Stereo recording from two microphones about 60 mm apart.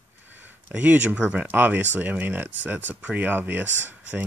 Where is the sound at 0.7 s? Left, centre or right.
Right.